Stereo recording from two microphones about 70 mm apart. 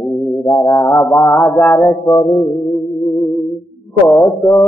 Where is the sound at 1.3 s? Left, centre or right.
Left.